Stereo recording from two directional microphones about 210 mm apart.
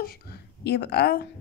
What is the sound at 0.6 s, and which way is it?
Speech, 50° left (ahead or behind).